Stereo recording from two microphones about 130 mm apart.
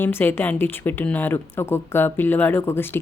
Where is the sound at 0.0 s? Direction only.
15° left (ahead or behind).